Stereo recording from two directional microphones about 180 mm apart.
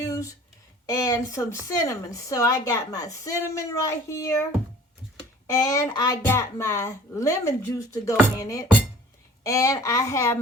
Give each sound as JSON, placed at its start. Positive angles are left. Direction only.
{"t": 0.0, "sound": "a sound", "side_deg": 20}
{"t": 0.9, "sound": "a woman's voice", "side_deg": 20}
{"t": 5.5, "sound": "a woman's voice", "side_deg": 15}
{"t": 8.4, "sound": "music", "side_deg": 20}
{"t": 9.4, "sound": "a woman's voice", "side_deg": 20}